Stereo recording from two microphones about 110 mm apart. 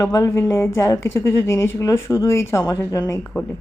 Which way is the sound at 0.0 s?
30° left (ahead or behind).